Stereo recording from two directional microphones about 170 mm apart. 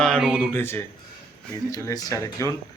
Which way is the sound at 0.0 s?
Centre (ahead or behind).